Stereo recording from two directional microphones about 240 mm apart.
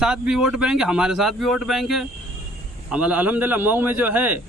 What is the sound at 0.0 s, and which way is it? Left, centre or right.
A man's voice, centre.